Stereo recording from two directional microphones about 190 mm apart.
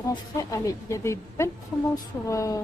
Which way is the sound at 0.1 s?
15° left (ahead or behind).